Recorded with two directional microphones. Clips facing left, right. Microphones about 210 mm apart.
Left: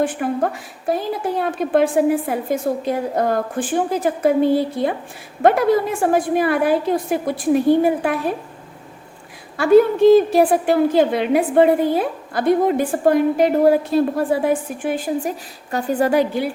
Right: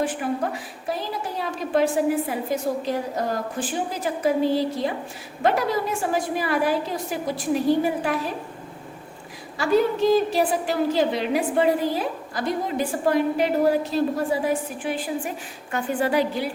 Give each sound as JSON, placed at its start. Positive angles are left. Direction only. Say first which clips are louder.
{"t": 0.2, "sound": "a woman's voice", "louder": "left 5 dB", "side_deg": 50}
{"t": 9.6, "sound": "a woman's voice", "louder": "left 8 dB", "side_deg": 55}